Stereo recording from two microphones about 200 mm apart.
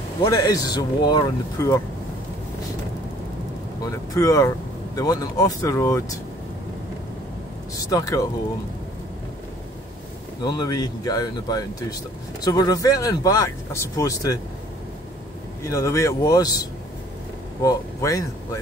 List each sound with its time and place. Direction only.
0.2 s speech: 20° left (ahead or behind)
3.8 s speech: 15° left (ahead or behind)
7.7 s speech: 15° left (ahead or behind)
10.4 s speech: 20° left (ahead or behind)
15.6 s speech: 15° left (ahead or behind)